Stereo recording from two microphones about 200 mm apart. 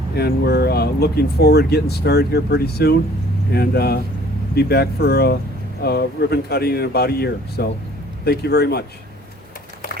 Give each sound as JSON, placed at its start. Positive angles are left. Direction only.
{"t": 0.2, "sound": "speech", "side_deg": 55}